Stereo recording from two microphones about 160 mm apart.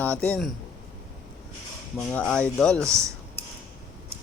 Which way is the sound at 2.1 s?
5° left (ahead or behind).